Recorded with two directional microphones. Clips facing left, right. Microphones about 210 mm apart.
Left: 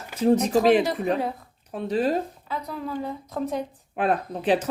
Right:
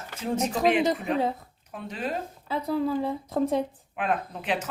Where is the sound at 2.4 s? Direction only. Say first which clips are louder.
Right 5 dB; 30° right (ahead or behind).